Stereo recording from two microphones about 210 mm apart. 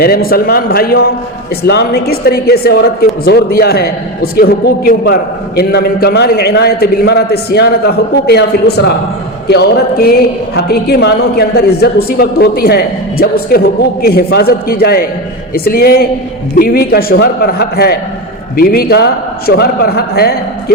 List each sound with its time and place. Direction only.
0.0 s a man's voice: 45° left (ahead or behind)